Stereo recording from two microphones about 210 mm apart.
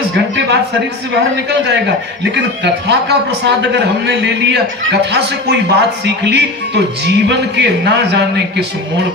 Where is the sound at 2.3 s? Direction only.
55° right (ahead or behind).